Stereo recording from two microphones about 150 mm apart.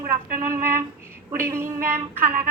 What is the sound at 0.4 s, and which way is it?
A woman's voice, 15° right (ahead or behind).